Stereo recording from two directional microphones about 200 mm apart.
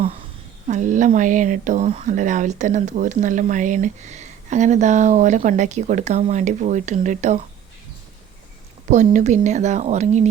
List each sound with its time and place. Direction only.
0.7 s speech: 40° right (ahead or behind)
9.1 s speech: 35° right (ahead or behind)